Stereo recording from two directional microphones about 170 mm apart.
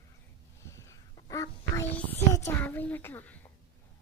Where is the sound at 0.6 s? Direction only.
15° left (ahead or behind).